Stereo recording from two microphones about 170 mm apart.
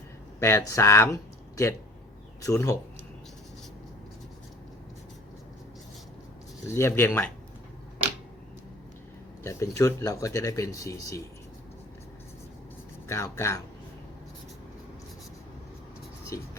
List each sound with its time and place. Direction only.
0.3 s speech: 15° left (ahead or behind)
6.7 s speech: 15° left (ahead or behind)
9.4 s speech: 15° left (ahead or behind)
13.1 s speech: 15° left (ahead or behind)
16.3 s speech: 20° left (ahead or behind)